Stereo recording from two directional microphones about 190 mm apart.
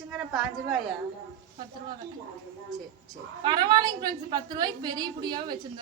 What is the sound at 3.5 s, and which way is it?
A woman's voice, 20° right (ahead or behind).